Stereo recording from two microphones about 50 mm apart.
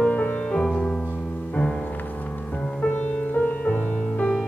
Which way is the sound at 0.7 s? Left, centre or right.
Centre.